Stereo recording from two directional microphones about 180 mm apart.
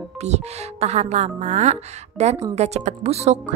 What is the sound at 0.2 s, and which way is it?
A woman's voice, 35° right (ahead or behind).